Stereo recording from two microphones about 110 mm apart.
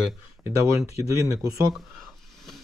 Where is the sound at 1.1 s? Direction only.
30° right (ahead or behind).